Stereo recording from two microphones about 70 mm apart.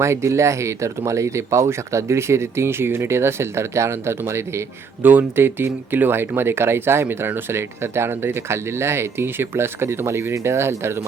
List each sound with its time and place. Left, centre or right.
0.0 s speech: right
5.0 s speech: right